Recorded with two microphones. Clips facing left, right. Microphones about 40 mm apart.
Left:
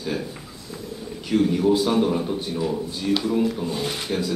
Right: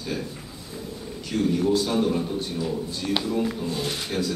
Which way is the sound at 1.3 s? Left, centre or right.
Centre.